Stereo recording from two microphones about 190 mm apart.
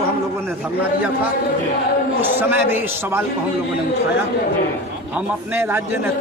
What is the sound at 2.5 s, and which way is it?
Speech, 10° right (ahead or behind).